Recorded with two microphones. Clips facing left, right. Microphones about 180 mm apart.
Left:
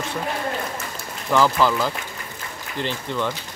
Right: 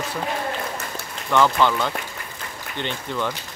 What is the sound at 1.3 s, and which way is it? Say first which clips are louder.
Speech: even; centre (ahead or behind).